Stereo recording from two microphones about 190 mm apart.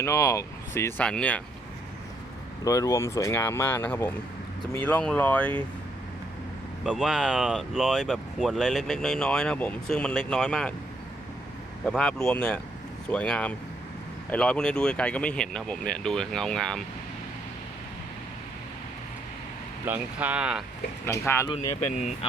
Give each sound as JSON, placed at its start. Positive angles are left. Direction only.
{"t": 0.0, "sound": "speech", "side_deg": 15}
{"t": 2.6, "sound": "speech", "side_deg": 15}
{"t": 6.8, "sound": "speech", "side_deg": -5}
{"t": 11.9, "sound": "speech", "side_deg": 5}
{"t": 19.8, "sound": "speech", "side_deg": -10}
{"t": 21.1, "sound": "speech", "side_deg": 15}
{"t": 21.5, "sound": "speech", "side_deg": 35}